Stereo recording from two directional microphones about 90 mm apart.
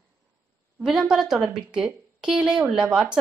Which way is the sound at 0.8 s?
5° right (ahead or behind).